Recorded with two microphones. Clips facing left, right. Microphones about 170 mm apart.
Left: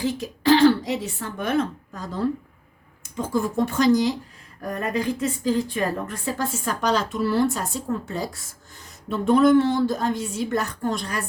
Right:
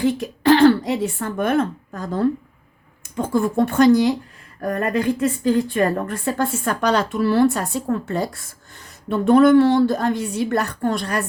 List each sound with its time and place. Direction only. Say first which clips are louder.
0.0 s a woman's voice: right 5 dB; 55° right (ahead or behind)